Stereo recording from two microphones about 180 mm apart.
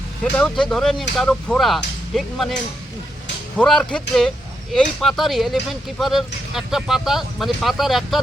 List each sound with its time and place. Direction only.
0.3 s speech: 5° left (ahead or behind)
3.6 s speech: 5° left (ahead or behind)